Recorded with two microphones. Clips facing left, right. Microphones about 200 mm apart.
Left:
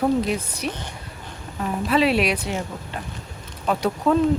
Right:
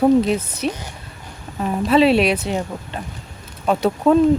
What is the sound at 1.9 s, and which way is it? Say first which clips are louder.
Speech: right 5 dB; 25° right (ahead or behind).